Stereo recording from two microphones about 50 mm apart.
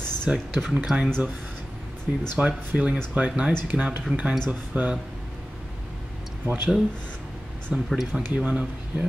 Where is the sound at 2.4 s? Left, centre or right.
Right.